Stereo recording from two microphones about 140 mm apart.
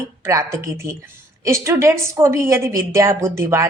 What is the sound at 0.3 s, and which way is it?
A woman's voice, 20° right (ahead or behind).